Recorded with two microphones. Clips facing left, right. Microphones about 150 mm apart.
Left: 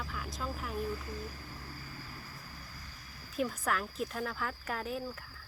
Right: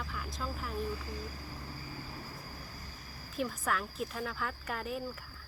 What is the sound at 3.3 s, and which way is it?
Speech, centre (ahead or behind).